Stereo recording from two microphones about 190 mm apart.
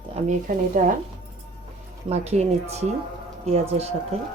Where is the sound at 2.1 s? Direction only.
35° right (ahead or behind).